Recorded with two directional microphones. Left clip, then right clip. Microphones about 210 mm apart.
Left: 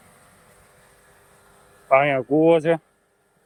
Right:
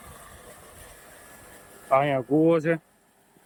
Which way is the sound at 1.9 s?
5° left (ahead or behind).